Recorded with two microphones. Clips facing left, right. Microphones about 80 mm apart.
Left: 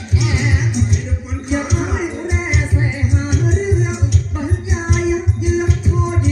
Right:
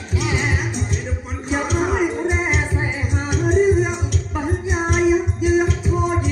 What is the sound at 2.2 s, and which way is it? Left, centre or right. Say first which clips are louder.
Music: right 1 dB; right.